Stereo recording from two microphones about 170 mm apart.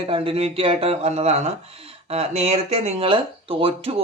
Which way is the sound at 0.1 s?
35° right (ahead or behind).